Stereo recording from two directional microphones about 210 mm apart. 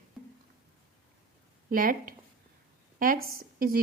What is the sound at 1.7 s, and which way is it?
A woman's voice, 40° right (ahead or behind).